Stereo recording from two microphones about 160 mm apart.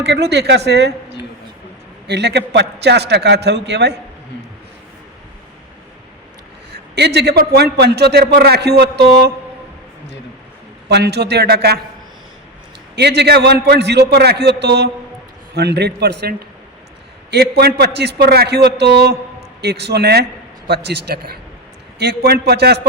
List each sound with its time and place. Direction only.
0.0 s a man's voice: 90° right
2.0 s a man's voice: 90° right
6.9 s a man's voice: 90° right
10.8 s a man's voice: 90° right
13.0 s a man's voice: 90° right
17.3 s a man's voice: 85° right
21.9 s a man's voice: 90° right